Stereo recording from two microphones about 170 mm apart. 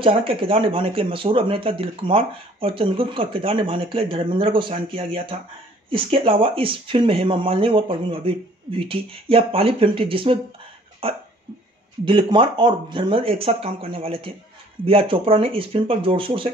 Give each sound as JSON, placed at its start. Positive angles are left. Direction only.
{"t": 0.0, "sound": "speech", "side_deg": -35}
{"t": 11.0, "sound": "hiccup", "side_deg": -35}
{"t": 12.0, "sound": "speech", "side_deg": -30}